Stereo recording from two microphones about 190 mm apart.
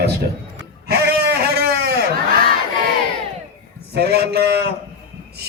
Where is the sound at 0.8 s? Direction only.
55° right (ahead or behind).